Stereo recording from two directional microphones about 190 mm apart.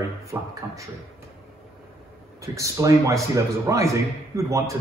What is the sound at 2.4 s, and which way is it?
A man's voice, 15° right (ahead or behind).